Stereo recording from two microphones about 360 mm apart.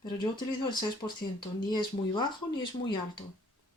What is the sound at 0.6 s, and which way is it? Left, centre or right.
Speech, centre.